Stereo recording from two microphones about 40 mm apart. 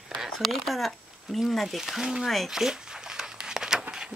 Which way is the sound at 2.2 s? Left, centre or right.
Centre.